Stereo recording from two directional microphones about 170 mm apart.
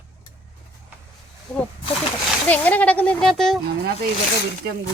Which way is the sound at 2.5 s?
10° left (ahead or behind).